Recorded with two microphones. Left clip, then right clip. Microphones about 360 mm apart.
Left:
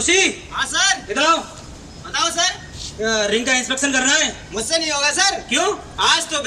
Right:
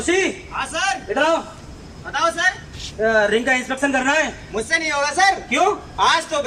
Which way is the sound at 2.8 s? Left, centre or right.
Right.